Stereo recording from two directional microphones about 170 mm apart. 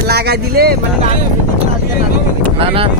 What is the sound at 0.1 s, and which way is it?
Speech, 70° right (ahead or behind).